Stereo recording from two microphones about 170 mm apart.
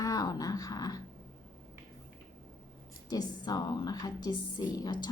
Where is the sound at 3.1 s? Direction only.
25° left (ahead or behind).